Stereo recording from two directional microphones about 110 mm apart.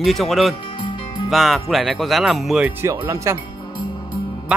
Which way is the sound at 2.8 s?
30° right (ahead or behind).